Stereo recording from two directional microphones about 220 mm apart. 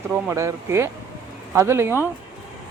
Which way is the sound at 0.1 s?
10° right (ahead or behind).